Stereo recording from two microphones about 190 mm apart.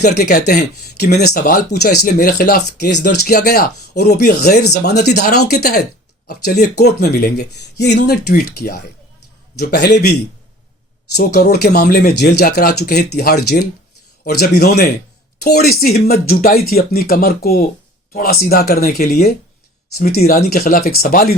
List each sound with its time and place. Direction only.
0.0 s speech: 55° left (ahead or behind)
11.1 s speech: 55° left (ahead or behind)